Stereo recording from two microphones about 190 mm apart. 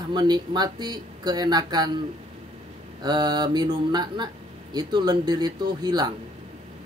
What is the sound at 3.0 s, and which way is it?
Speech, 20° right (ahead or behind).